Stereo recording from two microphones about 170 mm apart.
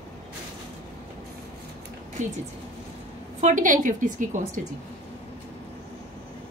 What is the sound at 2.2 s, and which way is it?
A woman's voice, 45° right (ahead or behind).